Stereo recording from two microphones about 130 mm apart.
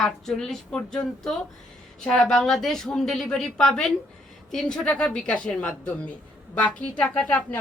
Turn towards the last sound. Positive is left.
turn(degrees=10)  # may be behind; listen again after turning